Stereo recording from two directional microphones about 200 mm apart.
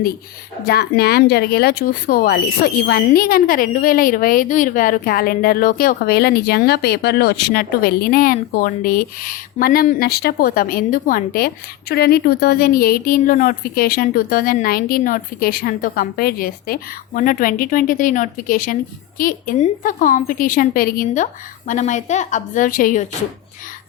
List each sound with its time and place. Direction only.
0.7 s a woman's voice: 50° left (ahead or behind)